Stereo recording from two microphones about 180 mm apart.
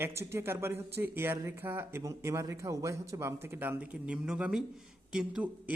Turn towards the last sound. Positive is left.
turn(degrees=-5)  # may be behind; listen again after turning